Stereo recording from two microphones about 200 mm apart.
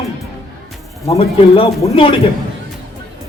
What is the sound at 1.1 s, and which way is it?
A man's voice, 30° left (ahead or behind).